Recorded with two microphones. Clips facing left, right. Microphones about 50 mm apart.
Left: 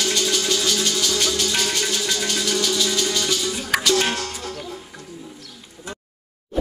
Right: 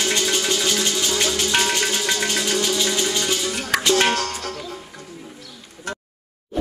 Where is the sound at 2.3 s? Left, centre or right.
Right.